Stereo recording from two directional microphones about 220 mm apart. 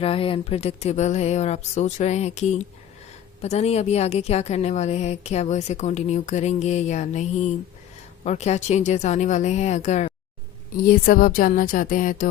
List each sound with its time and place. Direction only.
0.0 s a woman's voice: 25° left (ahead or behind)